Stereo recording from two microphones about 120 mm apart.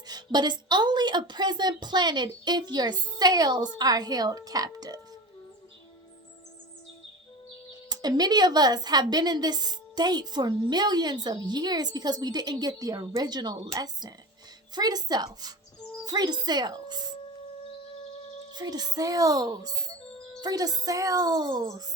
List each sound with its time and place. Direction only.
0.1 s a woman's voice: 35° right (ahead or behind)
7.9 s a woman's voice: 35° right (ahead or behind)
18.5 s a woman's voice: 35° right (ahead or behind)